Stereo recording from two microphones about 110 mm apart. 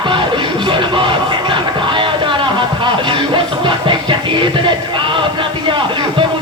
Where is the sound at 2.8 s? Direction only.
45° right (ahead or behind).